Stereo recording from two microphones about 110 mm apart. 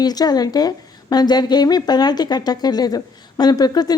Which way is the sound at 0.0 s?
35° left (ahead or behind).